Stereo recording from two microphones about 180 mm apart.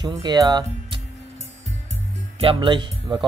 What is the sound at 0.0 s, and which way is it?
Speech, 25° right (ahead or behind).